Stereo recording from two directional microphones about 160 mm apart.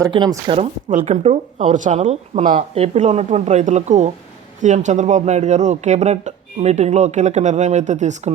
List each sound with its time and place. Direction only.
0.1 s speech: 30° right (ahead or behind)
0.9 s speech: 50° right (ahead or behind)
2.6 s speech: 40° right (ahead or behind)